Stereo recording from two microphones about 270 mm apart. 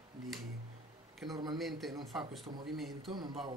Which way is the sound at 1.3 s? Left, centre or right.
Centre.